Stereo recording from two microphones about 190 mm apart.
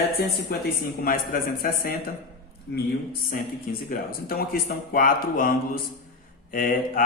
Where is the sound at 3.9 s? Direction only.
55° left (ahead or behind).